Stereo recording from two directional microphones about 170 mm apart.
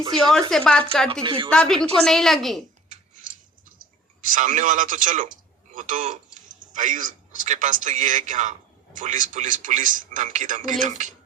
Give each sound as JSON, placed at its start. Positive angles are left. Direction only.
{"t": 0.2, "sound": "a woman's voice", "side_deg": 0}
{"t": 1.2, "sound": "a woman's voice", "side_deg": -30}
{"t": 1.5, "sound": "a woman's voice", "side_deg": 5}
{"t": 2.9, "sound": "a sound", "side_deg": -50}
{"t": 3.8, "sound": "a man's voice", "side_deg": -55}